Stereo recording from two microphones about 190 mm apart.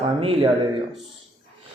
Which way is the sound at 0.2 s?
30° right (ahead or behind).